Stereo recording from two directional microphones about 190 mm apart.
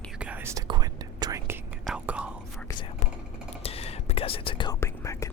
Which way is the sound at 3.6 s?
30° left (ahead or behind).